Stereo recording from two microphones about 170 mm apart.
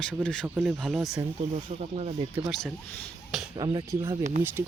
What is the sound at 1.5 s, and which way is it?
Speech, 40° right (ahead or behind).